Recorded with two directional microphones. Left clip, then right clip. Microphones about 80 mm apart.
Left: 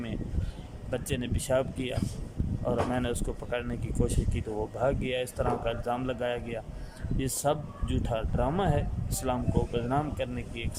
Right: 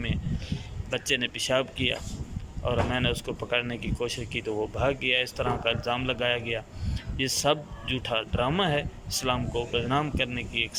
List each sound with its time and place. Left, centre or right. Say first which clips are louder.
0.9 s speech: right 6 dB; left
4.0 s speech: right 3 dB; left